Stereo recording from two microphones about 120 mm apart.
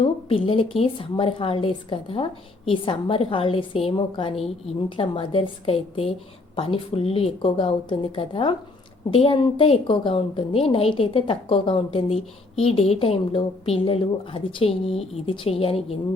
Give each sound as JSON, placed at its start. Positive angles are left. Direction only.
{"t": 0.0, "sound": "a woman's voice", "side_deg": 50}